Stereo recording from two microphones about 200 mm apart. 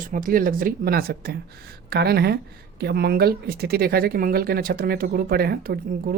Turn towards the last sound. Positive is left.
turn(degrees=-50)  # may be behind; listen again after turning